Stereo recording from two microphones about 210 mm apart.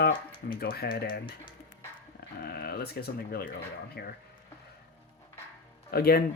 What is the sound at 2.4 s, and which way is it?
Speech, 50° left (ahead or behind).